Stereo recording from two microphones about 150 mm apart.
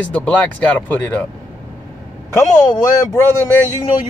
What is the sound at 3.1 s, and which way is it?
Speech, 20° left (ahead or behind).